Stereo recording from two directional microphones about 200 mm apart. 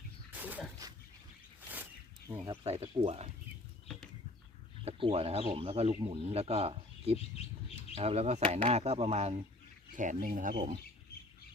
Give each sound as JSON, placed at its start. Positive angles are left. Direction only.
{"t": 0.3, "sound": "a sound", "side_deg": -10}
{"t": 1.7, "sound": "zipper", "side_deg": -10}
{"t": 2.5, "sound": "speech", "side_deg": -30}
{"t": 4.9, "sound": "speech", "side_deg": -30}